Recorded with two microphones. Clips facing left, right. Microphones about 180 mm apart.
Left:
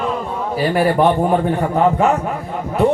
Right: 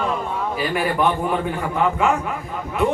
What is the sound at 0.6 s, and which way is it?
Music, 35° left (ahead or behind).